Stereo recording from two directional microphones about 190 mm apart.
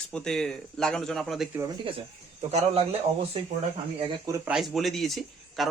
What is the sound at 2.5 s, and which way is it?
Speech, 35° right (ahead or behind).